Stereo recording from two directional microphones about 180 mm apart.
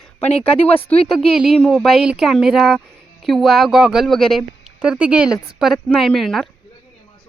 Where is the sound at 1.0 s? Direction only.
Centre (ahead or behind).